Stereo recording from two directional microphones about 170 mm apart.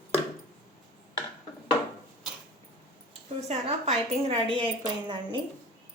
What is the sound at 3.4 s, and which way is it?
A woman's voice, 35° right (ahead or behind).